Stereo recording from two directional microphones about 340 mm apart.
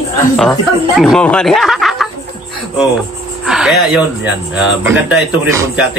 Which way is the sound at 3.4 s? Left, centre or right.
Centre.